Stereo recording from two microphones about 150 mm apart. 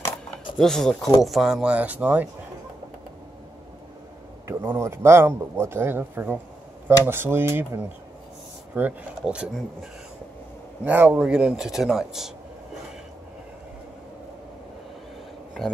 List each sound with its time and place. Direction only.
0.6 s a man's voice: 5° left (ahead or behind)
4.5 s a man's voice: 20° right (ahead or behind); by 12.3 s 5° right (ahead or behind)